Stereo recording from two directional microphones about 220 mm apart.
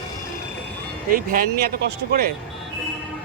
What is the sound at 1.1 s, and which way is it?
Speech, 40° right (ahead or behind).